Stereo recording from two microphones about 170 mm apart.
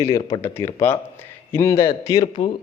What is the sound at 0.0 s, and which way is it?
A man's voice, 20° left (ahead or behind).